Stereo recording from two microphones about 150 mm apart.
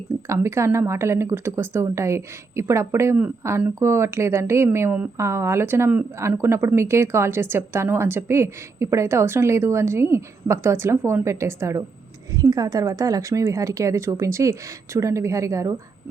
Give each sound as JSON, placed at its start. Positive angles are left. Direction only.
{"t": 0.3, "sound": "speech", "side_deg": -20}